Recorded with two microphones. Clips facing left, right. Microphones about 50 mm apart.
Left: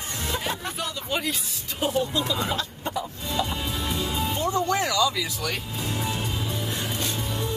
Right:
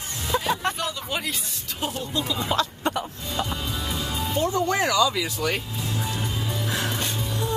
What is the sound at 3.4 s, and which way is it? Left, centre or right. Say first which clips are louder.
Music: right 1 dB; centre.